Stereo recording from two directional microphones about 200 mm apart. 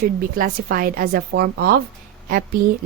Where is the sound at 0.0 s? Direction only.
45° right (ahead or behind).